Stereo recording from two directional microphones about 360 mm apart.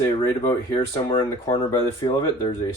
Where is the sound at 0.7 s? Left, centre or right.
Centre.